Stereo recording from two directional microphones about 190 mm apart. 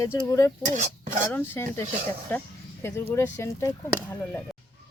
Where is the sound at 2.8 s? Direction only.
15° left (ahead or behind).